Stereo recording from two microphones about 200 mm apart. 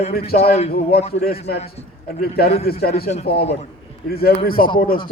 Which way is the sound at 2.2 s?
50° left (ahead or behind).